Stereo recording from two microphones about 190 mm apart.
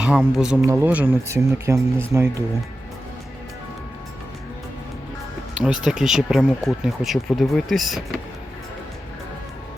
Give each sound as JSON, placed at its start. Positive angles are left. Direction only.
{"t": 0.0, "sound": "speech", "side_deg": -5}
{"t": 5.5, "sound": "speech", "side_deg": -5}